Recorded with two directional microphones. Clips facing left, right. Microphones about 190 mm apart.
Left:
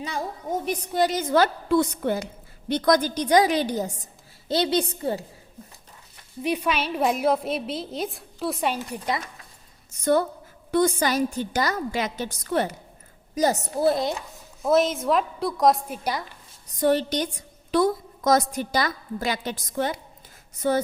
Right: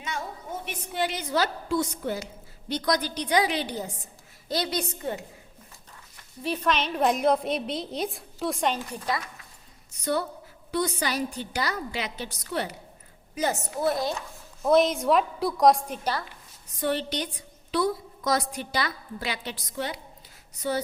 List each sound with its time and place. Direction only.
0.0 s a woman's voice: 35° left (ahead or behind)
4.4 s a woman's voice: 25° left (ahead or behind)
6.4 s a woman's voice: 10° left (ahead or behind)
10.0 s a woman's voice: 50° left (ahead or behind)
13.3 s a woman's voice: 40° left (ahead or behind); by 14.2 s 20° left (ahead or behind)
14.6 s a woman's voice: centre (ahead or behind)
16.6 s a woman's voice: 40° left (ahead or behind)